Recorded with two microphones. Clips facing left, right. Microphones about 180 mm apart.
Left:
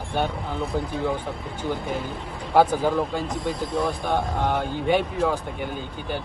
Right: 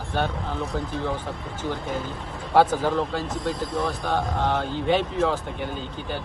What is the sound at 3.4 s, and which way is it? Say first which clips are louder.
Speech: left 2 dB; centre (ahead or behind).